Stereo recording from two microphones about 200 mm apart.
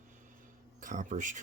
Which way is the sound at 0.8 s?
40° right (ahead or behind).